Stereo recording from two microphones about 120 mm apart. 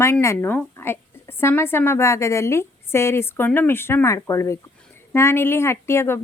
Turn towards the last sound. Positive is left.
turn(degrees=20)  # may be behind; listen again after turning